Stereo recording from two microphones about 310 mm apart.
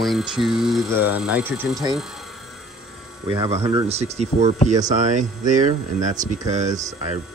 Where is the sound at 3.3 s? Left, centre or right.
Centre.